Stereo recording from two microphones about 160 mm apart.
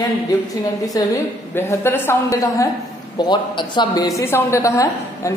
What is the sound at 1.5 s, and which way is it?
A man's voice, 15° left (ahead or behind).